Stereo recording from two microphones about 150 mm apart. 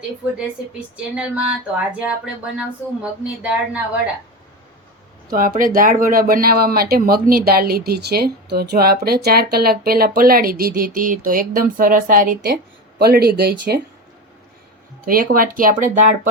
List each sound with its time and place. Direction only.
1.1 s speech: 10° right (ahead or behind)
5.3 s speech: 70° right (ahead or behind)
13.0 s speech: 90° right
15.0 s speech: 70° right (ahead or behind)